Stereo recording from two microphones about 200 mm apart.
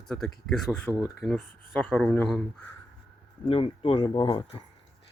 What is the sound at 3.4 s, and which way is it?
Speech, 30° left (ahead or behind).